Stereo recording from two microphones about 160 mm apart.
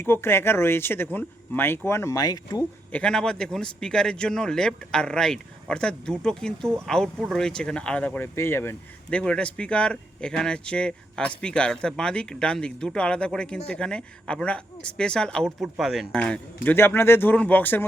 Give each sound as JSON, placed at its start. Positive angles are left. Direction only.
{"t": 0.0, "sound": "speech", "side_deg": 15}
{"t": 2.9, "sound": "a man's voice", "side_deg": 5}